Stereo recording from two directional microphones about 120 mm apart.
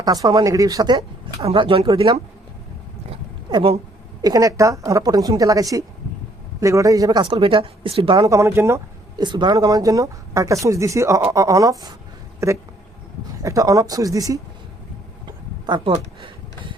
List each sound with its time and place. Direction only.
0.0 s speech: 30° right (ahead or behind)
1.4 s speech: 50° right (ahead or behind)
3.1 s a sound: 50° right (ahead or behind)
4.2 s speech: 30° right (ahead or behind)
8.3 s speech: 25° right (ahead or behind)
9.1 s speech: 40° right (ahead or behind)
15.6 s speech: 40° right (ahead or behind)